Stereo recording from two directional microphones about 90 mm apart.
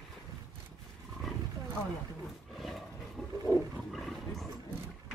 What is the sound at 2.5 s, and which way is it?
Roar, centre (ahead or behind).